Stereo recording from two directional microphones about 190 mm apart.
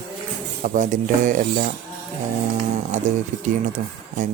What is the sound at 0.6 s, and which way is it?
Speech, 40° right (ahead or behind).